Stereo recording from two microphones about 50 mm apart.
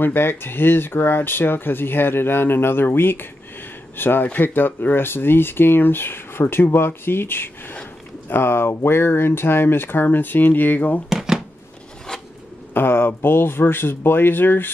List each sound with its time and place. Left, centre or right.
0.0 s speech: left
11.1 s a sound: centre
12.7 s speech: left